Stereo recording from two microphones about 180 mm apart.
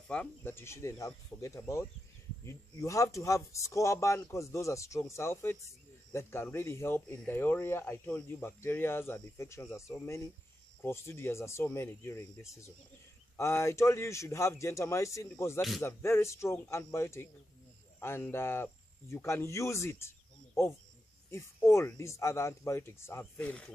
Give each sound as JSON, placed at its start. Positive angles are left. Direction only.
{"t": 0.1, "sound": "speech", "side_deg": 10}